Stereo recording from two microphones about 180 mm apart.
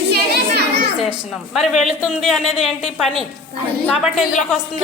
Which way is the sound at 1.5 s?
Centre (ahead or behind).